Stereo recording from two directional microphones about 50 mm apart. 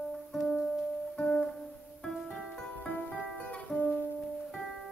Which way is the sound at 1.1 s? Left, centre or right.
Left.